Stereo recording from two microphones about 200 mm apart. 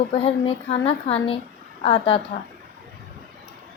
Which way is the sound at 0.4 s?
30° left (ahead or behind).